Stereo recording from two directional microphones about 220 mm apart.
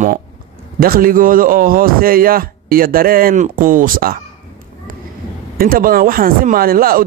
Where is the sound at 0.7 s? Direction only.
40° right (ahead or behind).